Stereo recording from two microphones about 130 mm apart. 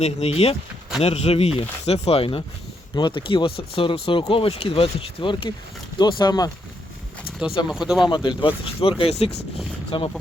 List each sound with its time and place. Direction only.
0.0 s speech: 50° left (ahead or behind); by 6.5 s 30° left (ahead or behind)
7.7 s speech: 5° right (ahead or behind)
8.1 s speech: 40° left (ahead or behind)